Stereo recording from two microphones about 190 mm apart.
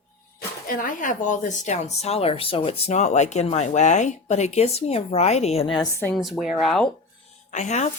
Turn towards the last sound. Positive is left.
turn(degrees=40)  # may be behind; listen again after turning